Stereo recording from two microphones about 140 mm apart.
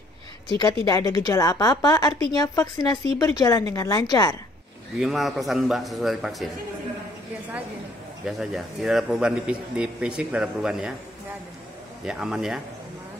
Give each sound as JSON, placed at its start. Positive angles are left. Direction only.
{"t": 0.6, "sound": "a woman's voice", "side_deg": 25}
{"t": 5.0, "sound": "a man's voice", "side_deg": 0}
{"t": 8.3, "sound": "a man's voice", "side_deg": 0}
{"t": 12.0, "sound": "a man's voice", "side_deg": -5}